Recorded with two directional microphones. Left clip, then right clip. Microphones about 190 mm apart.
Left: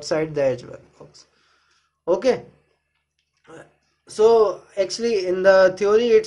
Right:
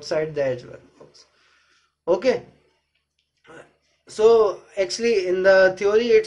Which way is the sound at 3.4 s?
25° left (ahead or behind).